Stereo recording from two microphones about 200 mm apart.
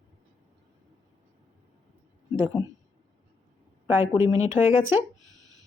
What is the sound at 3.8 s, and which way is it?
Speech, 10° right (ahead or behind).